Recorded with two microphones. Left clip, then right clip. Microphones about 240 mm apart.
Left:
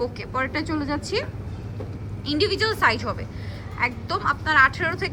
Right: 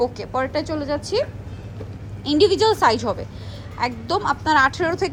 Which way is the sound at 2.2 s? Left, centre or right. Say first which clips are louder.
Right 6 dB; centre.